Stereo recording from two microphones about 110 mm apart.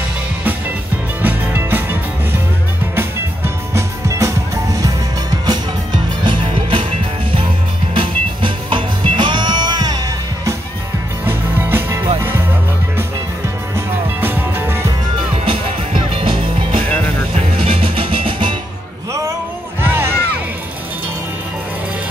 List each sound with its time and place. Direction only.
1.2 s music: 15° right (ahead or behind)
3.0 s music: 25° right (ahead or behind)
6.2 s music: 50° right (ahead or behind)
7.9 s music: 50° right (ahead or behind)
11.2 s music: 20° right (ahead or behind)
13.7 s music: 20° right (ahead or behind)
15.1 s music: 55° right (ahead or behind)
19.8 s music: 20° right (ahead or behind)